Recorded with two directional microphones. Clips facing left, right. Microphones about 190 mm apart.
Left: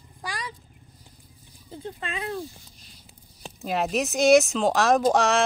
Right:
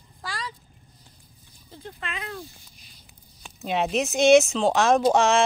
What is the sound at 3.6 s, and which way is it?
A woman's voice, centre (ahead or behind).